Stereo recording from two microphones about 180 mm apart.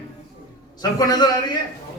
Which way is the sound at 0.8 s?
20° left (ahead or behind).